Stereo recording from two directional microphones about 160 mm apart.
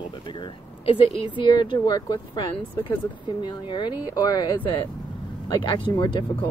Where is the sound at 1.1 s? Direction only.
30° left (ahead or behind).